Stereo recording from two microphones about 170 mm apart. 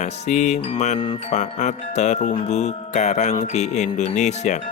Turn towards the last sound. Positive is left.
turn(degrees=45)  # may be behind; listen again after turning